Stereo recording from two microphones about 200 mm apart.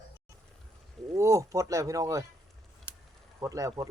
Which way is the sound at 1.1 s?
15° right (ahead or behind).